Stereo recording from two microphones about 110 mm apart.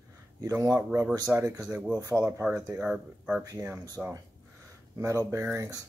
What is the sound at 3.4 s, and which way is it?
Speech, 30° right (ahead or behind).